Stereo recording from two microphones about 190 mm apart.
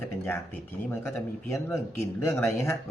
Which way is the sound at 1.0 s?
15° left (ahead or behind).